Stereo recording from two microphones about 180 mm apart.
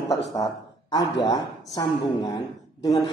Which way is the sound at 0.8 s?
20° left (ahead or behind).